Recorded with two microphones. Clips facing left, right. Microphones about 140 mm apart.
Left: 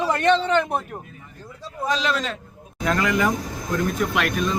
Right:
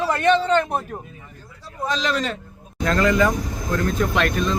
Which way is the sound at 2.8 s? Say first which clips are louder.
Right 3 dB; 15° left (ahead or behind).